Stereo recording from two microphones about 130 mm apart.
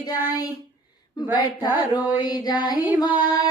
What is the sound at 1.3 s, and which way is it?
Music, 30° left (ahead or behind).